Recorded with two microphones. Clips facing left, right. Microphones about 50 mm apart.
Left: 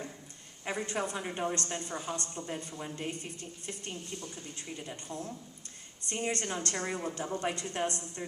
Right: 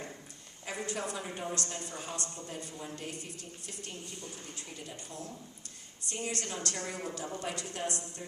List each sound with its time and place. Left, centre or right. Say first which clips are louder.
0.6 s a woman's voice: left 3 dB; left
4.9 s a woman's voice: left 4 dB; left